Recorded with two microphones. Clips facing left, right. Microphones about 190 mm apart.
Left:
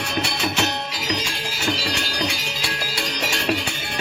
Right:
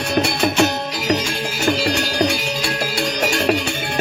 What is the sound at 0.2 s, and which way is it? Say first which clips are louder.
Music: right 8 dB; 50° right (ahead or behind).